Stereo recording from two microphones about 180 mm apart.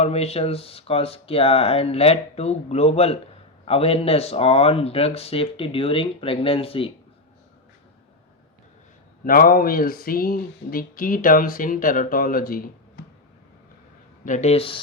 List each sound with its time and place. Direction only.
0.0 s speech: 35° left (ahead or behind)
9.2 s speech: 55° left (ahead or behind)
14.3 s speech: 40° left (ahead or behind)